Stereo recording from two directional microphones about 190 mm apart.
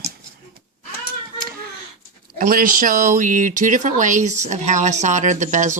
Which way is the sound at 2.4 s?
45° right (ahead or behind).